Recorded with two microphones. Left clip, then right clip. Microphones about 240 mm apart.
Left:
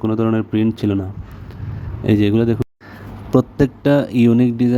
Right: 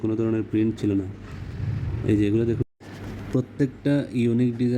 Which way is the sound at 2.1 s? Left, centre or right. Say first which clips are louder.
Left 6 dB; left.